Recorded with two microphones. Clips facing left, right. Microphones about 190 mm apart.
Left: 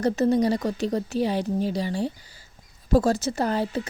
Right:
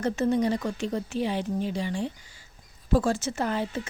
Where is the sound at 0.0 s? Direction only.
35° left (ahead or behind).